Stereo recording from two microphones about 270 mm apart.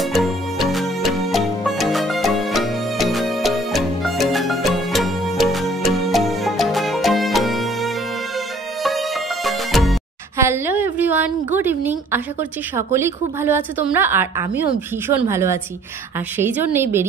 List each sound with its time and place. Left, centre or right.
0.0 s music: centre
15.0 s a woman's voice: centre